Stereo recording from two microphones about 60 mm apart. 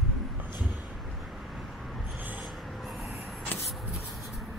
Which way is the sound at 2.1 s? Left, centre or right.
Right.